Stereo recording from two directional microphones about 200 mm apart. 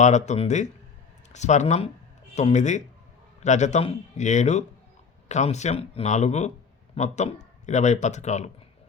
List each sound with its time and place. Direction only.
0.0 s speech: 35° left (ahead or behind)